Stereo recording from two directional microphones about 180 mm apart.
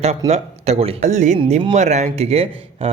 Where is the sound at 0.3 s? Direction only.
35° right (ahead or behind).